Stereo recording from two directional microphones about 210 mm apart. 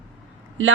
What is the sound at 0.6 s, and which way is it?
Speech, 65° right (ahead or behind).